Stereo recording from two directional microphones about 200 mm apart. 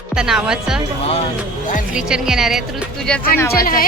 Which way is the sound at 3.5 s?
45° left (ahead or behind).